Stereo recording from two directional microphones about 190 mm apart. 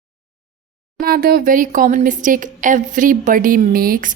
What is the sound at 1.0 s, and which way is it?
A woman's voice, 50° right (ahead or behind).